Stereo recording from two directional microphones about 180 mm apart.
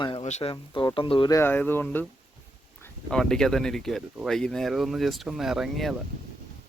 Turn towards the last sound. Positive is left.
turn(degrees=0)  # may be behind; listen again after turning